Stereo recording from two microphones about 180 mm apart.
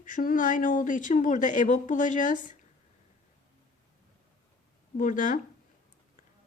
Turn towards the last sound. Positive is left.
turn(degrees=45)  # may be behind; listen again after turning